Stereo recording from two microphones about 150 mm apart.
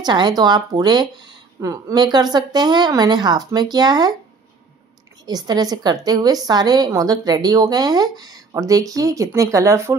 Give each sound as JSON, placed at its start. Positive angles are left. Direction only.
{"t": 0.0, "sound": "a woman's voice", "side_deg": -30}
{"t": 5.2, "sound": "a woman's voice", "side_deg": -25}